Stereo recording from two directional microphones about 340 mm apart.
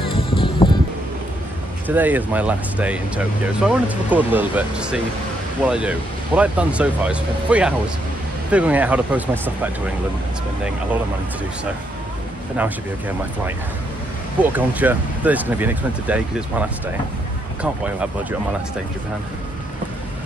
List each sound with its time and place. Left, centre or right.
0.0 s music: centre
1.9 s speech: centre
14.4 s speech: centre